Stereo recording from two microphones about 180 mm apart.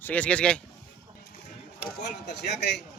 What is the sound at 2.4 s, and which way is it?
Speech, 70° left (ahead or behind).